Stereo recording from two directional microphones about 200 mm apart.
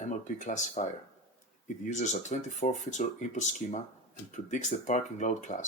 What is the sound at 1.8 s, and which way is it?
Speech, 35° left (ahead or behind).